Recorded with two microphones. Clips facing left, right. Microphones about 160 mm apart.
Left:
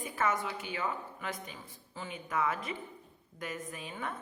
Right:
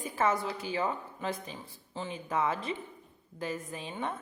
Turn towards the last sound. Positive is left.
turn(degrees=-25)  # may be behind; listen again after turning